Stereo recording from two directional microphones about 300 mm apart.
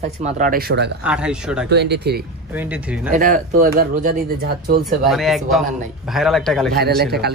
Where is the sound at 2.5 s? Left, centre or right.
Centre.